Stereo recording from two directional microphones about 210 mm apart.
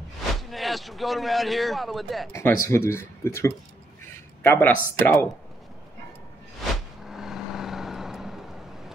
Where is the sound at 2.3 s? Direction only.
10° left (ahead or behind).